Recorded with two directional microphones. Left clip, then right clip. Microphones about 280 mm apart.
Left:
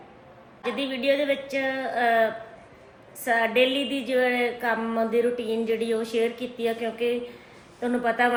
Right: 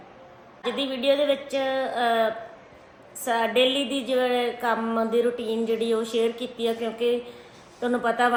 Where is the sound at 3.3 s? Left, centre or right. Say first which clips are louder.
Even; centre.